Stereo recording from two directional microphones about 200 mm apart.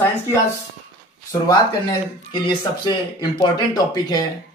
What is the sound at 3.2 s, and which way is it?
A man's voice, 20° left (ahead or behind).